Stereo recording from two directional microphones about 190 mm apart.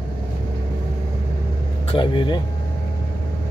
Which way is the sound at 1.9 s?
25° left (ahead or behind).